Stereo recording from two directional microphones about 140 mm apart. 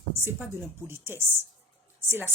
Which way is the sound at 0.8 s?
15° right (ahead or behind).